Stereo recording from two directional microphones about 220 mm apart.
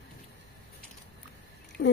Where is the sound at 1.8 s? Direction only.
55° left (ahead or behind).